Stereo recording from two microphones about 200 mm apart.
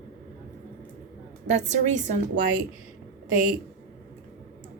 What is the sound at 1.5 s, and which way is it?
Speech, 35° right (ahead or behind).